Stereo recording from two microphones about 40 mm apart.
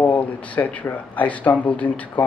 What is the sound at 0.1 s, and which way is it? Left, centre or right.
Speech, left.